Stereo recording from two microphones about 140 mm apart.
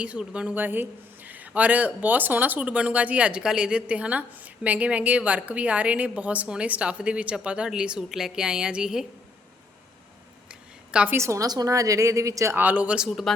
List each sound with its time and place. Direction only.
0.0 s speech: 10° right (ahead or behind)
10.5 s a sound: 10° right (ahead or behind)
11.2 s a woman's voice: 25° right (ahead or behind); by 13.3 s centre (ahead or behind)